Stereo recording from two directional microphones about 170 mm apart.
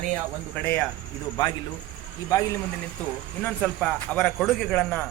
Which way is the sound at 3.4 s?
5° left (ahead or behind).